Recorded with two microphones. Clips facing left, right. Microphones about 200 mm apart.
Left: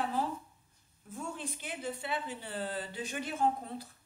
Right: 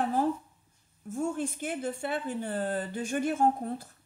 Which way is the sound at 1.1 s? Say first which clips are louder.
Right 10 dB; 50° right (ahead or behind).